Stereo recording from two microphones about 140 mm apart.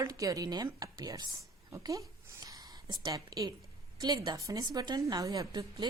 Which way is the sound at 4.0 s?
30° right (ahead or behind).